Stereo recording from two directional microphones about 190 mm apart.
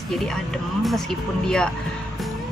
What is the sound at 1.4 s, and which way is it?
Speech, 5° left (ahead or behind).